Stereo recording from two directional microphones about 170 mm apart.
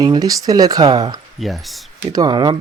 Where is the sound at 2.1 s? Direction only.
25° right (ahead or behind).